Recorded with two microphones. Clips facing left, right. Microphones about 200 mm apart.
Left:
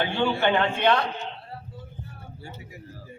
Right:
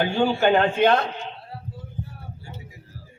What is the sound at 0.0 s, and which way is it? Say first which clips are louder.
A man's voice: right 3 dB; 40° right (ahead or behind).